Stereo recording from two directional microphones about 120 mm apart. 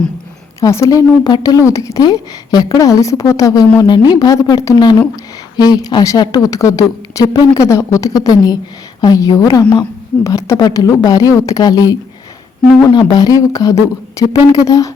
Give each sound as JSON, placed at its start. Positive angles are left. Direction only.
{"t": 0.6, "sound": "a woman's voice", "side_deg": 25}
{"t": 10.2, "sound": "a woman's voice", "side_deg": 25}